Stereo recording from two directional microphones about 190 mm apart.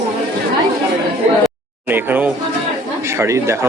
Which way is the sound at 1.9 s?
10° right (ahead or behind).